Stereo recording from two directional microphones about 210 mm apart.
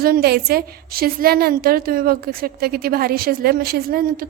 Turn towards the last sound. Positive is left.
turn(degrees=-45)  # may be behind; listen again after turning